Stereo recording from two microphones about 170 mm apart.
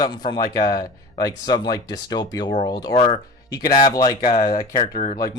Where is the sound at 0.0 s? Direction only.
25° left (ahead or behind).